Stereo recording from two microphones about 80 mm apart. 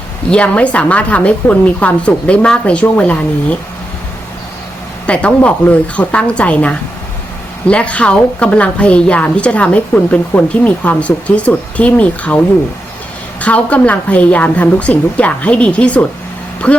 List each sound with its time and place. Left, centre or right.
0.3 s a woman's voice: centre
5.0 s a woman's voice: centre
13.4 s a woman's voice: centre